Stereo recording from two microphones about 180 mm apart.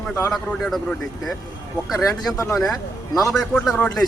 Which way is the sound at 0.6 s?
Centre (ahead or behind).